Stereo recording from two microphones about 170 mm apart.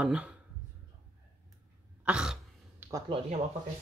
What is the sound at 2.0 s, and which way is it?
Throat clearing, 5° right (ahead or behind).